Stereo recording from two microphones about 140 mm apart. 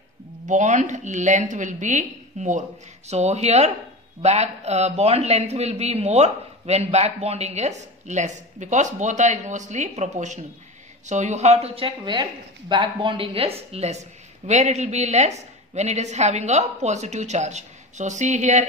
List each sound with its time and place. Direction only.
0.5 s a woman's voice: 60° right (ahead or behind)